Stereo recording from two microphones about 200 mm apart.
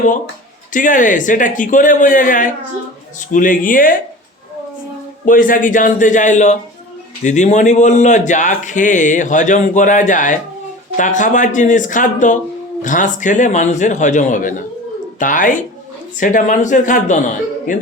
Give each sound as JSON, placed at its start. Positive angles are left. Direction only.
{"t": 0.7, "sound": "speech", "side_deg": 40}
{"t": 5.2, "sound": "speech", "side_deg": 40}